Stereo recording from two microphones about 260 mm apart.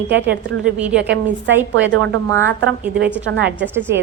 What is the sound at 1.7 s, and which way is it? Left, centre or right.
A woman's voice, right.